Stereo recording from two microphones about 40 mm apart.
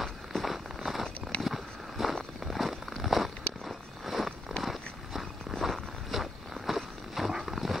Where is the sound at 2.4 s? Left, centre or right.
Centre.